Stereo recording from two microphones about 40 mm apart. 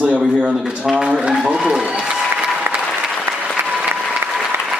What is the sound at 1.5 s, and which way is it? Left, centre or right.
Speech, centre.